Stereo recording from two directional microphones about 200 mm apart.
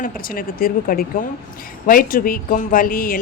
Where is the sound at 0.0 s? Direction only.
45° left (ahead or behind).